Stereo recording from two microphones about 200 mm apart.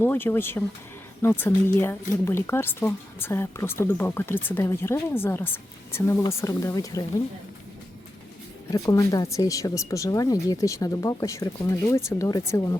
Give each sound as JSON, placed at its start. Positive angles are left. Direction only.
{"t": 0.0, "sound": "speech", "side_deg": 10}
{"t": 8.7, "sound": "speech", "side_deg": 15}